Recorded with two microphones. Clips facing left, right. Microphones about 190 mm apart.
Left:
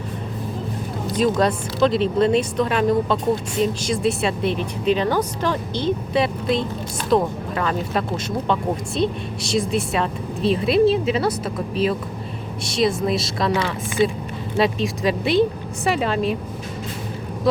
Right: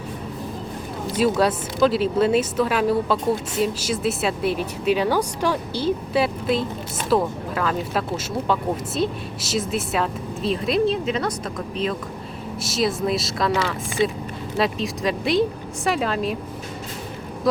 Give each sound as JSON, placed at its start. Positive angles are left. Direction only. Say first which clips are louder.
{"t": 1.1, "sound": "a woman's voice", "louder": "even", "side_deg": -5}
{"t": 17.5, "sound": "speech", "louder": "left 1 dB", "side_deg": 0}